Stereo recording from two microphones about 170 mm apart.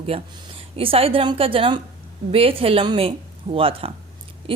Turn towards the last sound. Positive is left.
turn(degrees=-30)  # may be behind; listen again after turning